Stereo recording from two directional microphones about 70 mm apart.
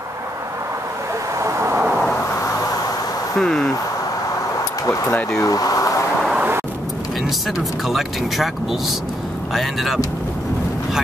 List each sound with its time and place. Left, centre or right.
1.4 s vehicle: right
3.3 s speech: centre
4.8 s speech: left
7.5 s speech: centre
9.5 s speech: centre